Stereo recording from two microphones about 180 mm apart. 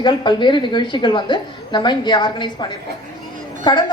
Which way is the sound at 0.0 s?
25° left (ahead or behind).